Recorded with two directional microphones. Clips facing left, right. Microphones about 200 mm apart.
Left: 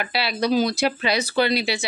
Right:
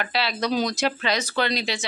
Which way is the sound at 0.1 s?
10° left (ahead or behind).